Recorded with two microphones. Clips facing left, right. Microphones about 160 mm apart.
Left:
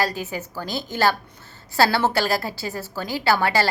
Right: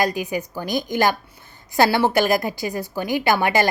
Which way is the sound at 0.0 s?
15° right (ahead or behind).